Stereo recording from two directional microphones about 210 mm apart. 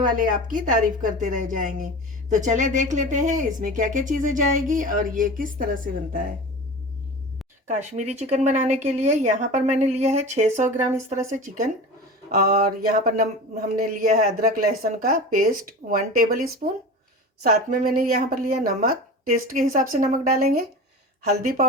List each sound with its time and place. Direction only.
0.0 s speech: 40° right (ahead or behind)
7.7 s speech: 35° right (ahead or behind)